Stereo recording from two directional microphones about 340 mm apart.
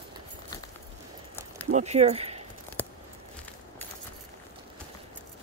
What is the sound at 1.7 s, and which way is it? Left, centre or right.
Speech, centre.